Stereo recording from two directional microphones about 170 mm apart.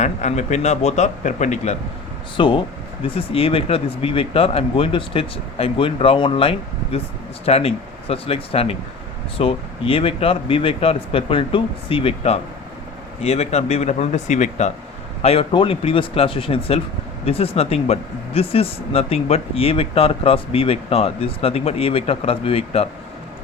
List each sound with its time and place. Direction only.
0.0 s speech: 45° left (ahead or behind)
2.3 s speech: 30° left (ahead or behind); by 14.7 s 45° left (ahead or behind)
15.2 s speech: 35° left (ahead or behind)